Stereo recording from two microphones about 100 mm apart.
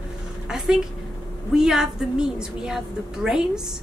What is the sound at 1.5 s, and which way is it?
A woman's voice, 5° right (ahead or behind).